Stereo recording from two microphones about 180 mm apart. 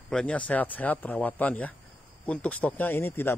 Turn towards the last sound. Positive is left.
turn(degrees=15)  # may be behind; listen again after turning